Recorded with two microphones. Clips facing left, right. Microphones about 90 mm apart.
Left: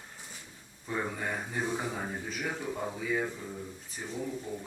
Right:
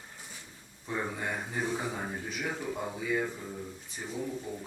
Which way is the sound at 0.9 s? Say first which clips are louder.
Even; centre (ahead or behind).